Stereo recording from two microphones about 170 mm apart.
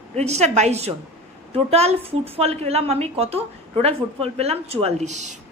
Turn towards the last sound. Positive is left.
turn(degrees=-45)  # may be behind; listen again after turning